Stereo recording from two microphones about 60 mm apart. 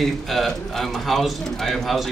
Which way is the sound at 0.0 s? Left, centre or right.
Centre.